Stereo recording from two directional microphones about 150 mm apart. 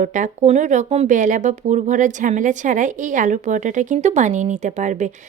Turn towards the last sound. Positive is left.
turn(degrees=-55)  # may be behind; listen again after turning